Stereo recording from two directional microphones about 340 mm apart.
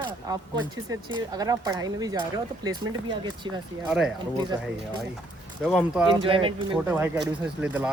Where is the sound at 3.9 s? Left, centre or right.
Centre.